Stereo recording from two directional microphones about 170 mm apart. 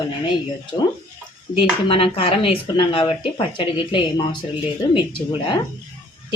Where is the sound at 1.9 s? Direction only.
35° left (ahead or behind).